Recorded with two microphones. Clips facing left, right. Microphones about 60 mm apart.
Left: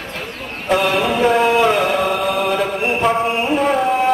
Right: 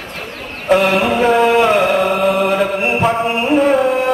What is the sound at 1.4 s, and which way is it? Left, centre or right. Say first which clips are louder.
Chant: right 3 dB; right.